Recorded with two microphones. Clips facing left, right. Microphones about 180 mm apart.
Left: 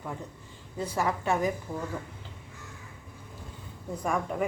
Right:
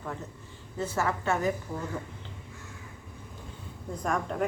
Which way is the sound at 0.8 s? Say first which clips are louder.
Even; 15° left (ahead or behind).